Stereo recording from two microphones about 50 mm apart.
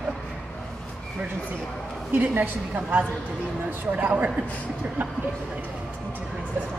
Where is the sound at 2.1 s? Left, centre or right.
Right.